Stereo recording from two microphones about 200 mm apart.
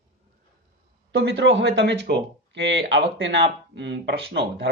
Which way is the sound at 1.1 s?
65° right (ahead or behind).